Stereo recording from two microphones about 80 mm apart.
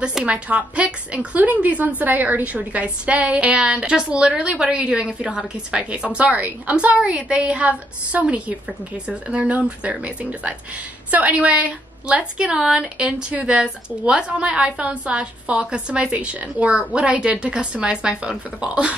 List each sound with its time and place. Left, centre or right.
0.0 s a woman's voice: centre